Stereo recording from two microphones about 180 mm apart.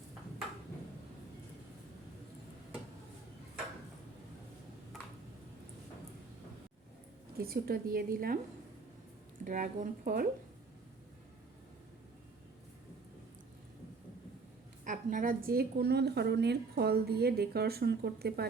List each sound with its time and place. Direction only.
7.3 s a woman's voice: 60° right (ahead or behind)
9.4 s speech: 50° right (ahead or behind)
14.8 s a woman's voice: 45° right (ahead or behind)